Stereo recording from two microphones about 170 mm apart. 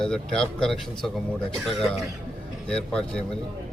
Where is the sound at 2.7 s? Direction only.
5° left (ahead or behind).